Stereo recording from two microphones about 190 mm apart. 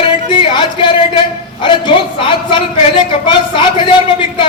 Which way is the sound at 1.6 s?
25° left (ahead or behind).